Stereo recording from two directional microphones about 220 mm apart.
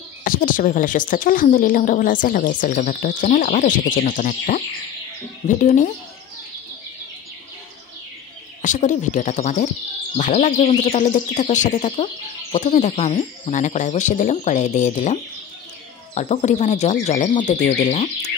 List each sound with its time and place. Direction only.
0.2 s a woman's voice: 40° left (ahead or behind)
5.6 s a woman's voice: 35° left (ahead or behind)
8.6 s a woman's voice: 35° left (ahead or behind)
16.2 s a woman's voice: 30° left (ahead or behind)